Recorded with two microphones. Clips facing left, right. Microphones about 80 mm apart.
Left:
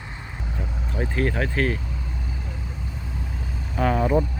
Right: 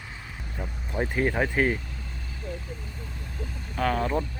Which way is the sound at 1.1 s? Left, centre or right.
Centre.